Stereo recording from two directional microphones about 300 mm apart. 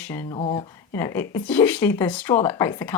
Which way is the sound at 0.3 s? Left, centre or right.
Centre.